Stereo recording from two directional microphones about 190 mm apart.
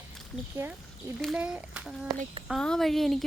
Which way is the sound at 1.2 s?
Centre (ahead or behind).